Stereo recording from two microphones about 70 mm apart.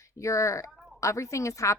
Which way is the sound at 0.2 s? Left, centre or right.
Left.